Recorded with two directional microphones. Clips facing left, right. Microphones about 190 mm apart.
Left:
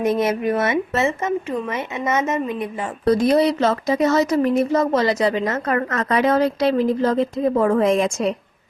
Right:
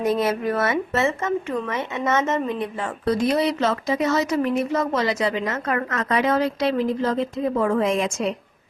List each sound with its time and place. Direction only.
0.0 s speech: 20° left (ahead or behind)
3.0 s speech: 40° left (ahead or behind)